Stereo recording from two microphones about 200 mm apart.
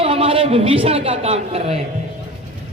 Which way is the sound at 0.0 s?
30° right (ahead or behind).